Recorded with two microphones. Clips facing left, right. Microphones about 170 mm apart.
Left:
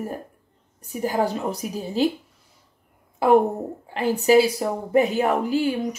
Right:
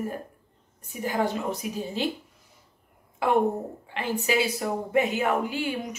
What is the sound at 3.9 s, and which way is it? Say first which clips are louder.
A woman's voice: left 9 dB; 40° left (ahead or behind).